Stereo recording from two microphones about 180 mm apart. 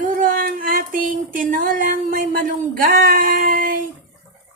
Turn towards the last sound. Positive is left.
turn(degrees=-50)  # may be behind; listen again after turning